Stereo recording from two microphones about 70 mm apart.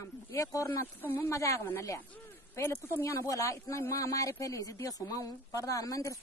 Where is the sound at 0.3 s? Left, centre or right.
Left.